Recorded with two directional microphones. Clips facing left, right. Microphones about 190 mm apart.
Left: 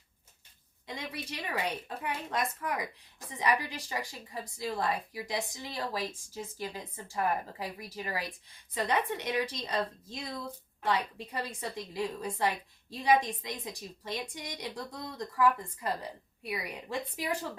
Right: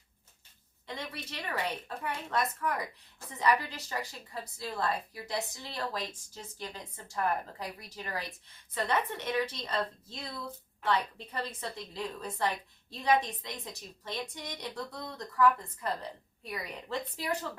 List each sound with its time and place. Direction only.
0.9 s a woman's voice: 10° left (ahead or behind)